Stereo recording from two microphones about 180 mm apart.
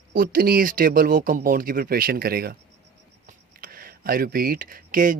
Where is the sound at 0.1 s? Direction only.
55° right (ahead or behind).